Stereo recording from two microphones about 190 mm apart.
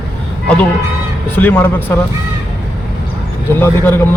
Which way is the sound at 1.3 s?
10° left (ahead or behind).